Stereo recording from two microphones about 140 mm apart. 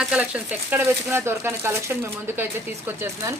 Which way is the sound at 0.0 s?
5° right (ahead or behind).